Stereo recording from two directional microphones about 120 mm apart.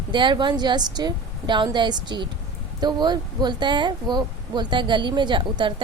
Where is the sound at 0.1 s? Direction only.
40° right (ahead or behind).